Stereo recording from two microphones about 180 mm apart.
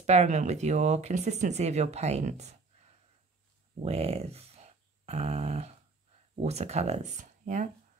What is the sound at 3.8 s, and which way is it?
Speech, 35° right (ahead or behind).